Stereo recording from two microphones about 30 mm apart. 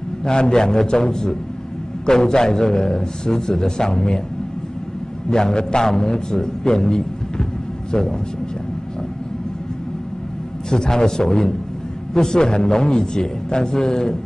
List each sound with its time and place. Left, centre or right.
0.2 s a man's voice: left
5.3 s a man's voice: left
10.7 s a man's voice: left